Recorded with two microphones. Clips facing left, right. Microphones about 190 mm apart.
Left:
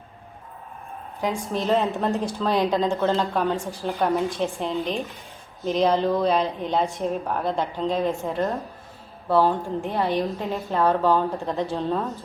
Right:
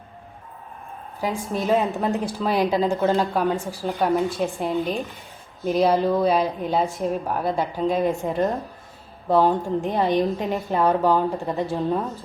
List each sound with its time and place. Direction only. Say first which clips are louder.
1.2 s a woman's voice: even; centre (ahead or behind)